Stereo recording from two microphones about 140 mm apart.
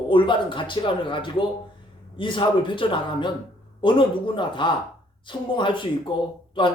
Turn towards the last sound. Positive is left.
turn(degrees=35)  # may be behind; listen again after turning